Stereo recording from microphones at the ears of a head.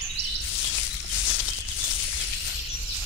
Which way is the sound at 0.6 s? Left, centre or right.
Left.